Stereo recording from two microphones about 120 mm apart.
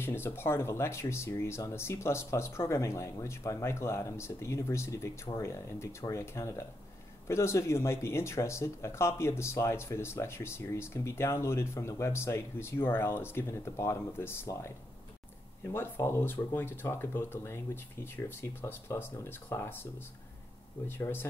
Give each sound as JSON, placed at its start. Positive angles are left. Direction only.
{"t": 0.0, "sound": "speech", "side_deg": 20}
{"t": 20.8, "sound": "speech", "side_deg": 20}